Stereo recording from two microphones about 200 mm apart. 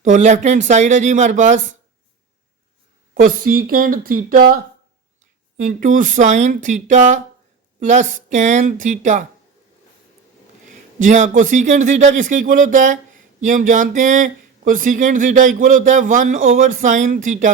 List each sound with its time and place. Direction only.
0.0 s speech: 40° right (ahead or behind)
3.2 s speech: 45° right (ahead or behind)
10.7 s speech: 40° right (ahead or behind)